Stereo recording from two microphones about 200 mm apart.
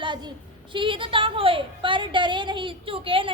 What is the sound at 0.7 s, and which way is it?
A woman's voice, 25° right (ahead or behind).